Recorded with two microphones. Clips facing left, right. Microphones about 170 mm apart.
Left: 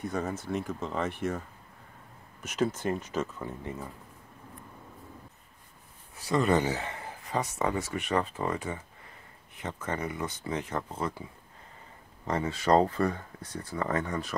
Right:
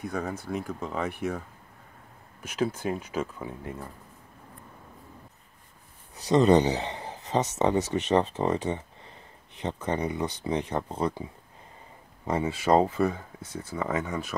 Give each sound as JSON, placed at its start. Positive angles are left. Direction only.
{"t": 0.0, "sound": "speech", "side_deg": 0}
{"t": 2.4, "sound": "speech", "side_deg": -10}
{"t": 6.1, "sound": "speech", "side_deg": -20}
{"t": 12.3, "sound": "speech", "side_deg": -10}